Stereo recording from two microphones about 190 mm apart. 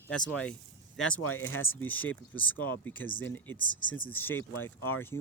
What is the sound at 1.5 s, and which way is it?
Speech, 90° left.